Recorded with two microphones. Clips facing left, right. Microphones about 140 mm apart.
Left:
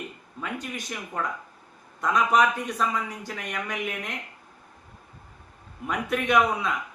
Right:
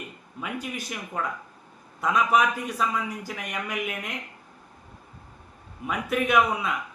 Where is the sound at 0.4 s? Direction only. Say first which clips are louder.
Right 1 dB; 10° right (ahead or behind).